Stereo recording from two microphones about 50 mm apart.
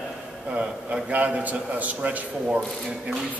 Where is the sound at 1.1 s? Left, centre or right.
Right.